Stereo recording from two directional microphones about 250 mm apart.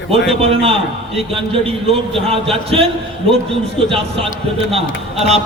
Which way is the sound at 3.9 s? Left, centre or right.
Right.